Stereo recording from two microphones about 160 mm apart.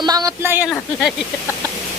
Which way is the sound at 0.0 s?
25° right (ahead or behind).